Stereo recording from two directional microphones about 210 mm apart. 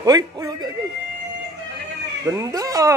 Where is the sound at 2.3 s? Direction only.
15° right (ahead or behind).